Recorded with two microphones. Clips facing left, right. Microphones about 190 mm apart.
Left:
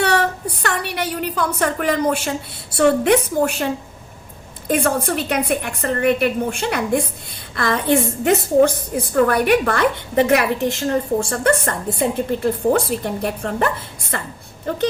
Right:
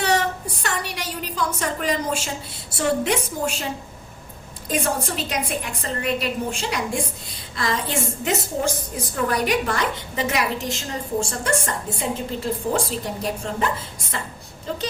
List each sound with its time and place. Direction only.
0.0 s a woman's voice: 60° left (ahead or behind)
4.7 s a woman's voice: 60° left (ahead or behind)